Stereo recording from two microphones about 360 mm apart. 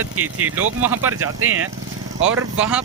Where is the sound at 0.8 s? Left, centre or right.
Centre.